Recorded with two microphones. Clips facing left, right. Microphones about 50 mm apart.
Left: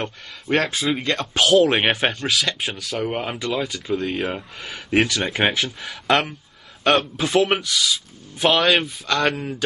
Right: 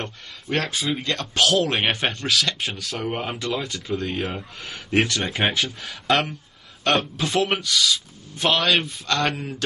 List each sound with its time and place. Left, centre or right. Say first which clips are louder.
0.0 s speech: left 3 dB; centre